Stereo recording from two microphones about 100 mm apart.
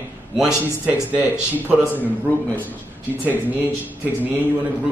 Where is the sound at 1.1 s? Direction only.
15° right (ahead or behind).